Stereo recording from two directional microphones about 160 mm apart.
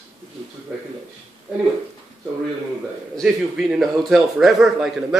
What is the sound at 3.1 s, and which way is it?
A man's voice, centre (ahead or behind).